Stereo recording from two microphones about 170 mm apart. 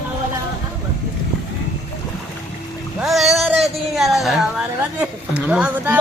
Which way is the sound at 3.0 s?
Centre (ahead or behind).